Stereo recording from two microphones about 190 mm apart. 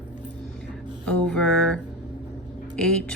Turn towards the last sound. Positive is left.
turn(degrees=5)  # may be behind; listen again after turning